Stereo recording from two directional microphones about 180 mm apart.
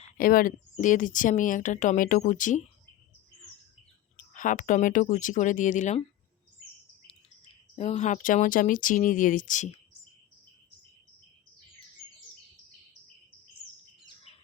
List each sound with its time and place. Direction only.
0.2 s speech: 55° left (ahead or behind)
4.2 s speech: 45° left (ahead or behind)
7.8 s speech: 40° left (ahead or behind)